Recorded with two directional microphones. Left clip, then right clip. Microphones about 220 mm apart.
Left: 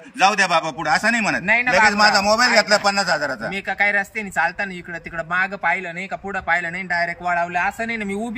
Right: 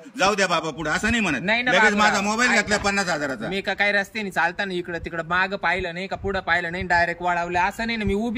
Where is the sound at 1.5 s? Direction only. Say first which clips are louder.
Left 3 dB; 15° right (ahead or behind).